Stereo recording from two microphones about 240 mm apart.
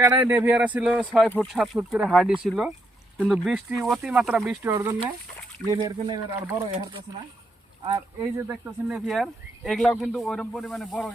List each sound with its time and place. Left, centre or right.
0.0 s speech: centre
4.7 s speech: centre
7.9 s speech: centre